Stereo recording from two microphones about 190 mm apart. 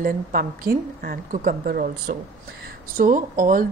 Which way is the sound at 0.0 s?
50° right (ahead or behind).